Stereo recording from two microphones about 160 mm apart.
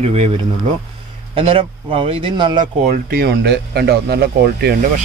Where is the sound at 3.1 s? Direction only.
75° right (ahead or behind).